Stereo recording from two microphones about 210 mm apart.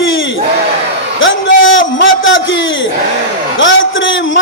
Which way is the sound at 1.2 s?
65° left (ahead or behind).